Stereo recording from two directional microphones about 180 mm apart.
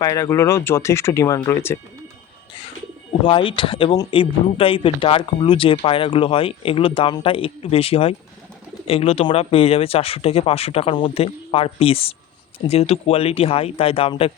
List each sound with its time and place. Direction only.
0.0 s speech: 15° left (ahead or behind)
3.2 s speech: 30° left (ahead or behind)